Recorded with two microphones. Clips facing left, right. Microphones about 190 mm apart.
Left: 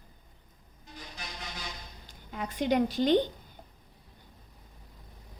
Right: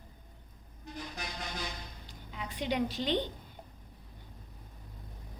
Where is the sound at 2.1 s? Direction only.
45° left (ahead or behind).